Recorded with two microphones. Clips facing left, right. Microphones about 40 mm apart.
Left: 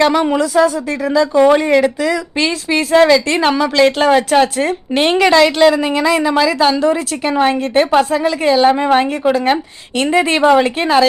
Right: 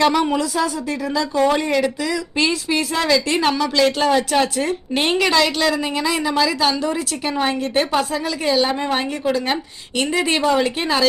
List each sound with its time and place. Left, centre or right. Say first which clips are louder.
0.0 s a woman's voice: left 4 dB; centre
3.4 s a woman's voice: left 5 dB; left
5.1 s a woman's voice: left 7 dB; centre
8.6 s a woman's voice: left 9 dB; left
10.4 s a woman's voice: left 7 dB; left